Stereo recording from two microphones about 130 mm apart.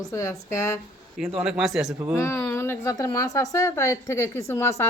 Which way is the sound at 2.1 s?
20° left (ahead or behind).